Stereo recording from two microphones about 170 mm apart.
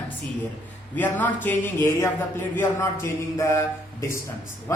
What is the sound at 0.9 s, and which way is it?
A man's voice, 10° left (ahead or behind).